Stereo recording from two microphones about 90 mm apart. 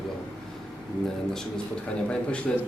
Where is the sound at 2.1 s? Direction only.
10° left (ahead or behind).